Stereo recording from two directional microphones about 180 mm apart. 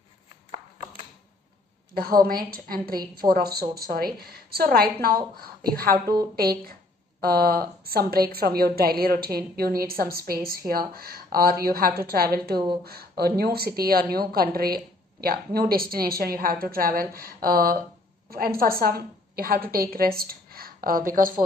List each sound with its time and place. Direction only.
2.0 s a woman's voice: 55° right (ahead or behind)